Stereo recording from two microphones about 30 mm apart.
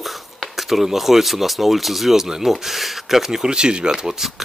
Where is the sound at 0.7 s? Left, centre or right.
Centre.